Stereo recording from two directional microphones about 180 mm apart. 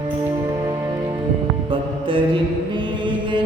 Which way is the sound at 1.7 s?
30° right (ahead or behind).